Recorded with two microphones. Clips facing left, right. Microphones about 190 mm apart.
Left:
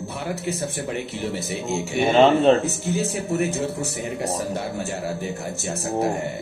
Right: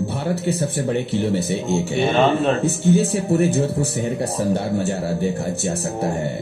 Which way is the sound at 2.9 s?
35° right (ahead or behind).